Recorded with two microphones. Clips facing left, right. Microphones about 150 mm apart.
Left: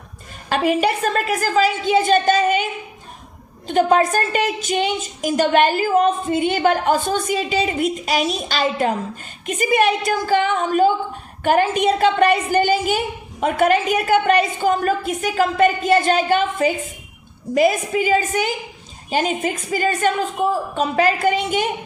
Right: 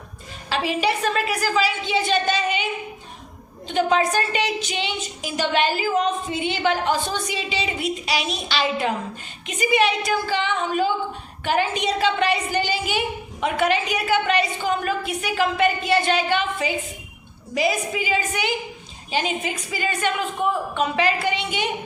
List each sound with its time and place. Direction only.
0.5 s a woman's voice: 50° left (ahead or behind)
3.8 s a woman's voice: 50° left (ahead or behind)